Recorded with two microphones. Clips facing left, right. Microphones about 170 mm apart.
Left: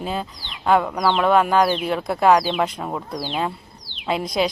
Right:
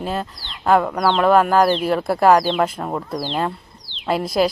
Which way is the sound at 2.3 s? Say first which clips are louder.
Right 2 dB; 10° left (ahead or behind).